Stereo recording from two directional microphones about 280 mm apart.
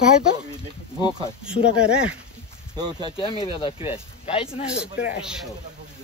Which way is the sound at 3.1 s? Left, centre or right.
Centre.